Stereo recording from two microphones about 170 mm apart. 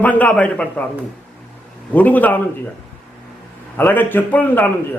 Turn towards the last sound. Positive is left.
turn(degrees=10)  # may be behind; listen again after turning